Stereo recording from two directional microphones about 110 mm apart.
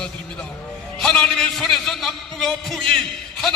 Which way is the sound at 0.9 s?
5° left (ahead or behind).